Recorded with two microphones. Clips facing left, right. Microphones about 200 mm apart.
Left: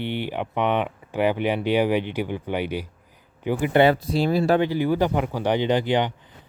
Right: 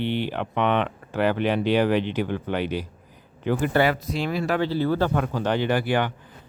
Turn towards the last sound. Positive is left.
turn(degrees=20)  # may be behind; listen again after turning